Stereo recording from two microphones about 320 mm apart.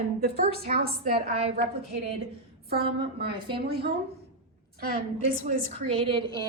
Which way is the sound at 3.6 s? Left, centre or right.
Right.